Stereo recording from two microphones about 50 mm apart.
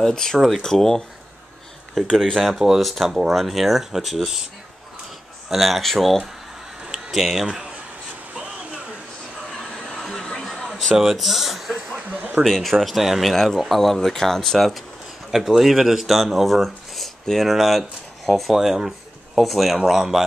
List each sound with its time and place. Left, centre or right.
0.0 s speech: centre
2.8 s speech: centre
5.5 s speech: centre
6.9 s a sound: centre
7.4 s a man's voice: centre
9.6 s a sound: centre
11.0 s speech: centre
12.1 s a man's voice: right
12.4 s speech: centre
13.3 s speech: centre